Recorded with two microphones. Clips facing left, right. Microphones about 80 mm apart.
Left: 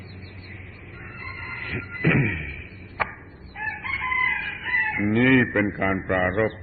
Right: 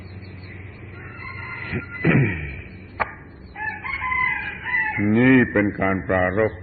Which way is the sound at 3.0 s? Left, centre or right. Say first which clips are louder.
Right 2 dB; centre.